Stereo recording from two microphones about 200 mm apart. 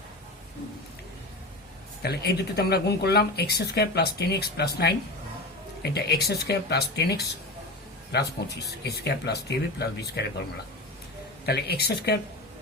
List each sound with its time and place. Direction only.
2.0 s speech: 55° left (ahead or behind)
11.4 s speech: 50° left (ahead or behind)